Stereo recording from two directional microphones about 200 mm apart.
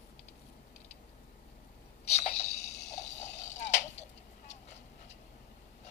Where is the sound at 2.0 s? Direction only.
30° left (ahead or behind).